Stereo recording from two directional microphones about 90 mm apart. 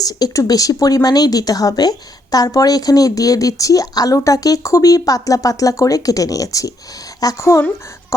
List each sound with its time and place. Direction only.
0.0 s speech: 45° left (ahead or behind)